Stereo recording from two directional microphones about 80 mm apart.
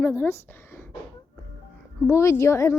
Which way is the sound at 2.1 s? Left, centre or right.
Left.